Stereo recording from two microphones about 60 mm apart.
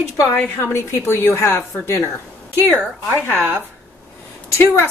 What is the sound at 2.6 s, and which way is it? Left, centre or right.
Speech, right.